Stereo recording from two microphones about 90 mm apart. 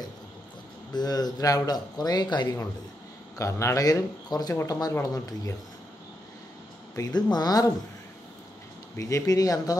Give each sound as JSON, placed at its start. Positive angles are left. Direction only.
{"t": 0.9, "sound": "speech", "side_deg": 50}
{"t": 3.3, "sound": "speech", "side_deg": 35}
{"t": 7.2, "sound": "speech", "side_deg": 50}
{"t": 8.9, "sound": "speech", "side_deg": 40}